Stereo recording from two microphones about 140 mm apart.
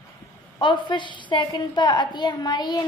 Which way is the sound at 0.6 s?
35° left (ahead or behind).